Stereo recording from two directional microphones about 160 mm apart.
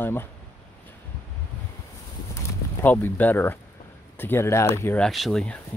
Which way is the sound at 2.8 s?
10° left (ahead or behind).